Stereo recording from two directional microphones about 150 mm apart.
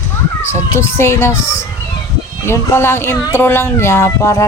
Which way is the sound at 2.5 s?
15° left (ahead or behind).